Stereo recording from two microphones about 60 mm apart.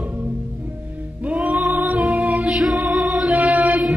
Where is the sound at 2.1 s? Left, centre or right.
Right.